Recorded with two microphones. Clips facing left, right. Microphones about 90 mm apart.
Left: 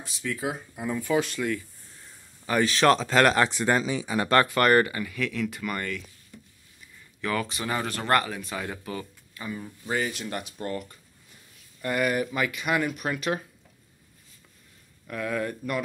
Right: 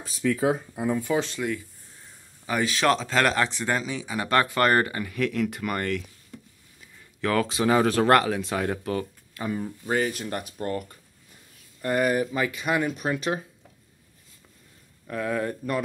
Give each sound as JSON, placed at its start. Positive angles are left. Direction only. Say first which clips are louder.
{"t": 0.3, "sound": "speech", "louder": "right 7 dB", "side_deg": -35}
{"t": 0.8, "sound": "speech", "louder": "right 1 dB", "side_deg": -25}
{"t": 2.4, "sound": "speech", "louder": "left 2 dB", "side_deg": -5}
{"t": 4.6, "sound": "speech", "louder": "left 1 dB", "side_deg": -25}
{"t": 7.2, "sound": "speech", "louder": "right 5 dB", "side_deg": -85}
{"t": 9.6, "sound": "speech", "louder": "right 3 dB", "side_deg": -40}
{"t": 15.0, "sound": "speech", "louder": "right 2 dB", "side_deg": -25}